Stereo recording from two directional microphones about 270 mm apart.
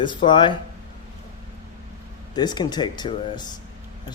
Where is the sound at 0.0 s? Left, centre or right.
Centre.